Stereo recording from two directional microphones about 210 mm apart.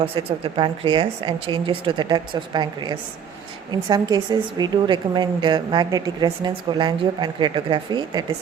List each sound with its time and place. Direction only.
0.0 s a woman's voice: 25° right (ahead or behind)